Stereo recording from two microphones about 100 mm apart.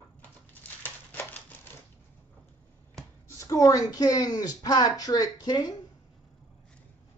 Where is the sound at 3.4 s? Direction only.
35° left (ahead or behind).